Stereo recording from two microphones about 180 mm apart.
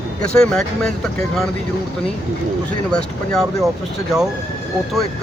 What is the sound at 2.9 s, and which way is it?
Speech, 5° left (ahead or behind).